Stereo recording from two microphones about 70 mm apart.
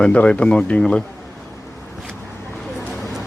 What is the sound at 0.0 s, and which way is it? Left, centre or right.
Speech, centre.